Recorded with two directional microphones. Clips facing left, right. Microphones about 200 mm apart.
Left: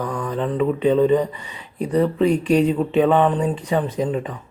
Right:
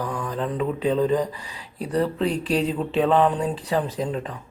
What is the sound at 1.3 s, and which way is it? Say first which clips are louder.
Mantra: left 2 dB; 10° right (ahead or behind).